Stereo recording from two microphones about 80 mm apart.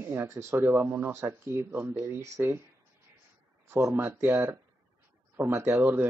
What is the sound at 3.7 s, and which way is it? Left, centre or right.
Speech, right.